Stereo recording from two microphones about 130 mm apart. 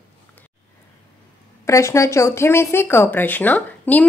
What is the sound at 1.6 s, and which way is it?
A woman's voice, 20° left (ahead or behind).